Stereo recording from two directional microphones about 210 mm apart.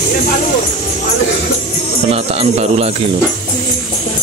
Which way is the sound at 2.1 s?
30° right (ahead or behind).